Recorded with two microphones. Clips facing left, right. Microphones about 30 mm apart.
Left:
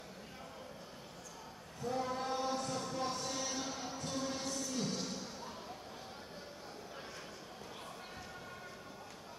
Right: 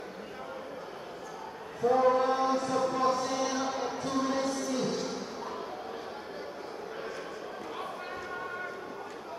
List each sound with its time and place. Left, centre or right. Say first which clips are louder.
1.8 s chant: right 14 dB; right